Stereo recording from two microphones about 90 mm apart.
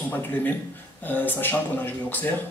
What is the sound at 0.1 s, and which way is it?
Speech, 20° left (ahead or behind).